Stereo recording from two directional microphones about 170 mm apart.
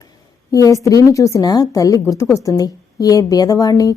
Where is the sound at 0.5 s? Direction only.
20° left (ahead or behind).